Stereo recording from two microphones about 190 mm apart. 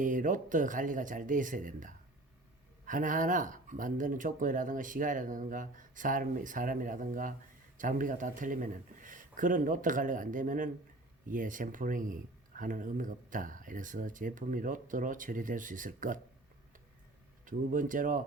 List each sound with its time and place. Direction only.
0.0 s speech: 45° right (ahead or behind)
17.4 s speech: 45° right (ahead or behind)